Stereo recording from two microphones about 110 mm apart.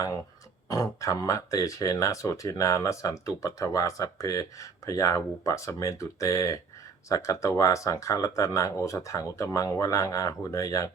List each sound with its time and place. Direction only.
0.7 s speech: 30° left (ahead or behind)